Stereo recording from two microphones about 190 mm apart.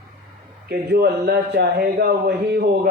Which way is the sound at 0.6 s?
55° right (ahead or behind).